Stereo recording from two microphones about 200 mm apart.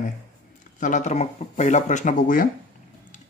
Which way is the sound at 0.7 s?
40° left (ahead or behind).